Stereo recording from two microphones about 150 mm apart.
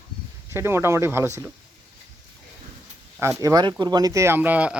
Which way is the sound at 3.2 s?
20° right (ahead or behind).